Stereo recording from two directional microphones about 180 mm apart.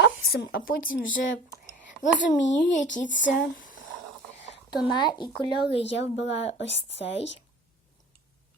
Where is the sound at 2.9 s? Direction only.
45° left (ahead or behind).